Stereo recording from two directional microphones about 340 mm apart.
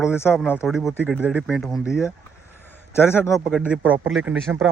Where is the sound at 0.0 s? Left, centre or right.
Centre.